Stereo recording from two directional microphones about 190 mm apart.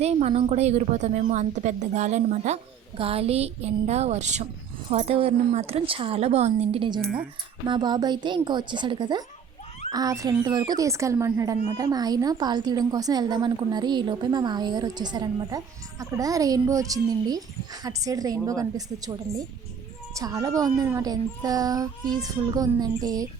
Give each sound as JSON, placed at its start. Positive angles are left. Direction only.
{"t": 0.0, "sound": "a woman's voice", "side_deg": -35}
{"t": 20.1, "sound": "speech", "side_deg": -20}